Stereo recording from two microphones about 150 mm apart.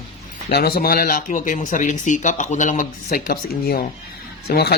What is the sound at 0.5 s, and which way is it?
Speech, 90° left.